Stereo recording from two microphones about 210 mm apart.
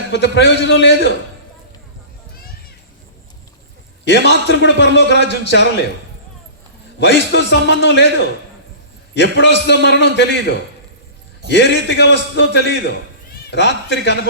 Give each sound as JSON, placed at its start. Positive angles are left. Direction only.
{"t": 0.1, "sound": "a man's voice", "side_deg": 55}
{"t": 4.0, "sound": "a man's voice", "side_deg": 55}
{"t": 7.0, "sound": "a man's voice", "side_deg": 55}
{"t": 9.1, "sound": "a man's voice", "side_deg": 55}